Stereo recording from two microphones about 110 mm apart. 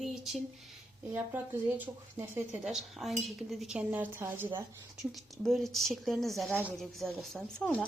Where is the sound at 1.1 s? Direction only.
15° right (ahead or behind).